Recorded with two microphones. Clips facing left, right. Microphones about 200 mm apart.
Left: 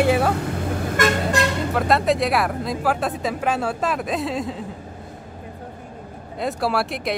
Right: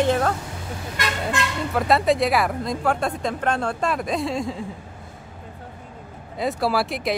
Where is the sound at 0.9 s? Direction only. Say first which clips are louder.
Left 5 dB; 45° left (ahead or behind).